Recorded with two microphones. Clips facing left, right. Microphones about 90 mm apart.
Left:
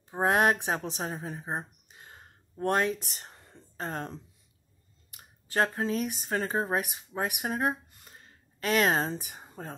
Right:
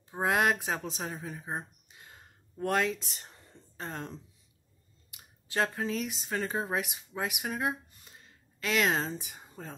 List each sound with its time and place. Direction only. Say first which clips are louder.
0.1 s speech: left 3 dB; 35° left (ahead or behind)
3.0 s a woman's voice: left 2 dB; 50° left (ahead or behind)
7.9 s a sound: left 2 dB; 45° left (ahead or behind)
9.2 s speech: left 3 dB; 45° left (ahead or behind)